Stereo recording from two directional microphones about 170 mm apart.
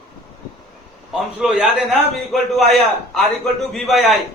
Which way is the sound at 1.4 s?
5° right (ahead or behind).